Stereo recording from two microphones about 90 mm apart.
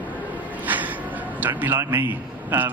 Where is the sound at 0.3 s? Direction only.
20° right (ahead or behind).